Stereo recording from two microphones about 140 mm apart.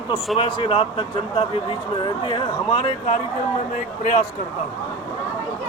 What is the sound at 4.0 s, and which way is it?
Speech, 65° left (ahead or behind).